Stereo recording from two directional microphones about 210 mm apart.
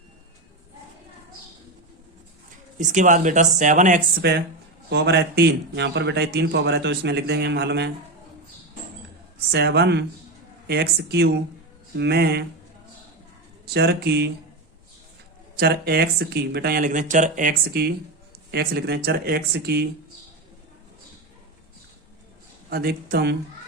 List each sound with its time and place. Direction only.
2.7 s speech: 35° right (ahead or behind)
4.2 s speech: 50° right (ahead or behind)
9.5 s speech: 50° right (ahead or behind)
13.7 s speech: 50° right (ahead or behind)
15.5 s speech: 50° right (ahead or behind)
22.7 s speech: 45° right (ahead or behind)